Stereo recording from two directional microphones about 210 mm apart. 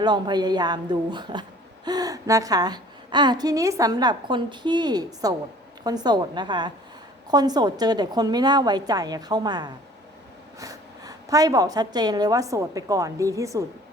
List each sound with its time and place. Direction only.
0.0 s a man's voice: 20° right (ahead or behind)